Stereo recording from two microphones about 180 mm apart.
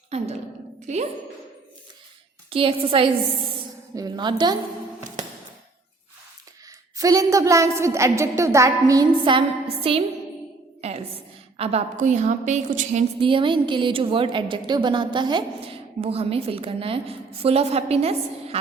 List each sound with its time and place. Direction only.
0.1 s a woman's voice: 35° right (ahead or behind)
2.5 s a woman's voice: 30° right (ahead or behind)
6.9 s a woman's voice: 20° right (ahead or behind)